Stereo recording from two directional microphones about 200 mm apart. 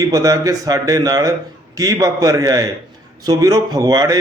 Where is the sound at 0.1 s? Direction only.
15° right (ahead or behind).